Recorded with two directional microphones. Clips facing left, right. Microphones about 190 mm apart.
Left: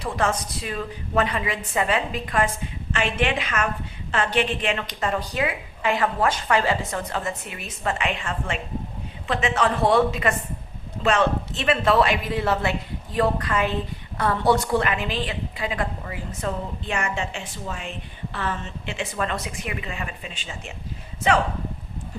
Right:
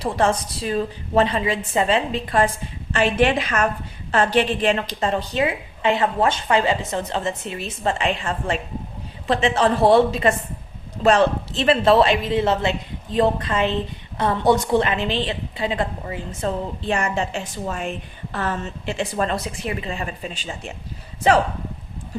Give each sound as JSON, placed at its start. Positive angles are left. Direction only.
{"t": 0.0, "sound": "a woman's voice", "side_deg": -30}